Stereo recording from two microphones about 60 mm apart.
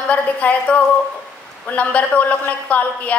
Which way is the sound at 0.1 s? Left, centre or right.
Left.